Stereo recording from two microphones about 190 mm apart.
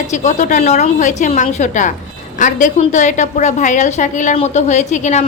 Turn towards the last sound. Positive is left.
turn(degrees=40)  # may be behind; listen again after turning